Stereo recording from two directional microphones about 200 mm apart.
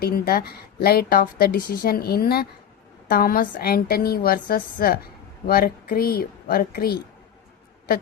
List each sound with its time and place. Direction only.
0.0 s a woman's voice: 50° left (ahead or behind)